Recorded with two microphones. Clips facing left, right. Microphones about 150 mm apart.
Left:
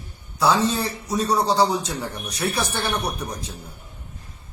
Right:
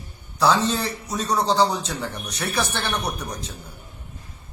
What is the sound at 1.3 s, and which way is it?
A man's voice, 10° left (ahead or behind).